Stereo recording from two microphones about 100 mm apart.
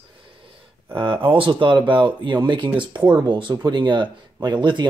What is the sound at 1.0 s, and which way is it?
Speech, 60° right (ahead or behind).